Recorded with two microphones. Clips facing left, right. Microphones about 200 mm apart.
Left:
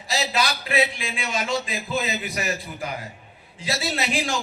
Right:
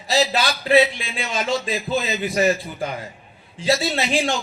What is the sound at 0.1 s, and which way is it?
A man's voice, 35° right (ahead or behind).